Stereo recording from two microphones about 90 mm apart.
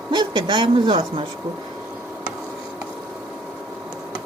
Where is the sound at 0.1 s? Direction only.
55° right (ahead or behind).